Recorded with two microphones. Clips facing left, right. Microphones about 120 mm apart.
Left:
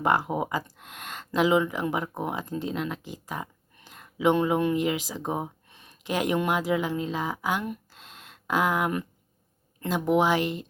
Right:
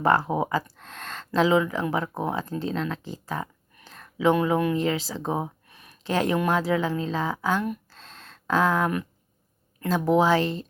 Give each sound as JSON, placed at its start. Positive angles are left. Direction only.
{"t": 0.0, "sound": "speech", "side_deg": 15}
{"t": 5.6, "sound": "a sound", "side_deg": 25}
{"t": 6.0, "sound": "speech", "side_deg": 15}
{"t": 10.2, "sound": "speech", "side_deg": 15}